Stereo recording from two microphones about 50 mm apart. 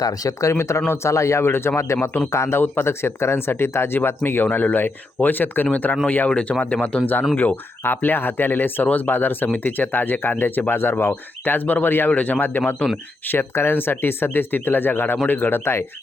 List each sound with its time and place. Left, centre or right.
0.5 s a man's voice: left
2.6 s speech: left
6.2 s speech: left
7.0 s speech: left
12.1 s speech: left
12.4 s speech: left
13.2 s speech: left